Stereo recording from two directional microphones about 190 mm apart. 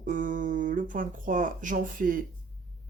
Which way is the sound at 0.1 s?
45° right (ahead or behind).